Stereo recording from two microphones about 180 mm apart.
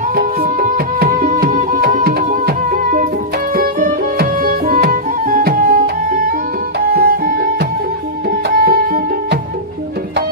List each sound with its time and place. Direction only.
0.1 s music: 55° right (ahead or behind)